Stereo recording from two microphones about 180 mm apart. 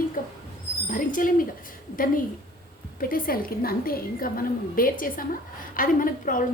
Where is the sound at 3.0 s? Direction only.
50° left (ahead or behind).